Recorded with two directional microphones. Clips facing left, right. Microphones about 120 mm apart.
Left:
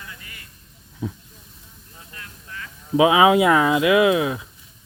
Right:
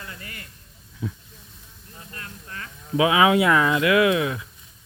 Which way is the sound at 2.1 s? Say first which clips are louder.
Right 1 dB; 45° right (ahead or behind).